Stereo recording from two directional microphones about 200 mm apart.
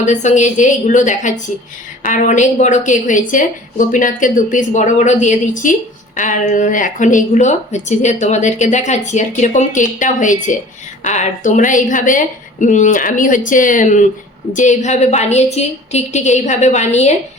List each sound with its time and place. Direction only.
0.0 s speech: 35° left (ahead or behind)